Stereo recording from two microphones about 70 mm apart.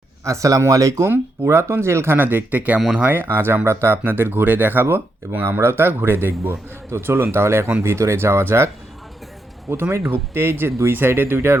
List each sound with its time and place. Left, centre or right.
0.3 s speech: right
1.0 s speech: right